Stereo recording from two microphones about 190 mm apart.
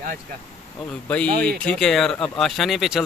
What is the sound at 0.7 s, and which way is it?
Speech, 5° left (ahead or behind).